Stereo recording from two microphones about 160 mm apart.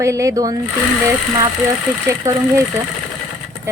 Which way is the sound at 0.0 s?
20° right (ahead or behind).